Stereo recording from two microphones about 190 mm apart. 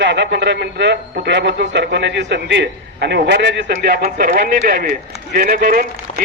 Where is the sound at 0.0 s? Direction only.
65° right (ahead or behind).